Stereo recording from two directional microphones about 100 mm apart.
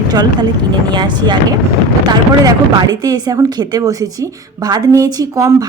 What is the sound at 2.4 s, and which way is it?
Speech, 45° right (ahead or behind).